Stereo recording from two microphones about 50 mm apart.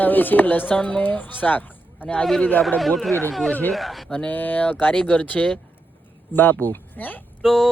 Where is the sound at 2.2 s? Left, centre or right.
Centre.